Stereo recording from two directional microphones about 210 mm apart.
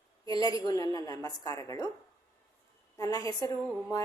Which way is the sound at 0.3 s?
15° left (ahead or behind).